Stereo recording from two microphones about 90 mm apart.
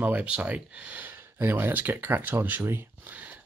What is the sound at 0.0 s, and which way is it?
Speech, 15° right (ahead or behind).